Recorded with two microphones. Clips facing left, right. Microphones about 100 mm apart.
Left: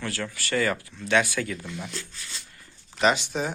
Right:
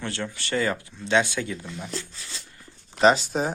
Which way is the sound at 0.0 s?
25° right (ahead or behind).